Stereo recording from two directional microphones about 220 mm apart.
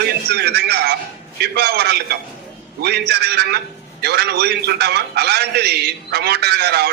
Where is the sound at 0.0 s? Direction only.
50° right (ahead or behind).